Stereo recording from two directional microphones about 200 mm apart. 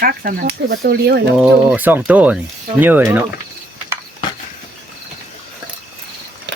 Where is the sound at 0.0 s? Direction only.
45° right (ahead or behind).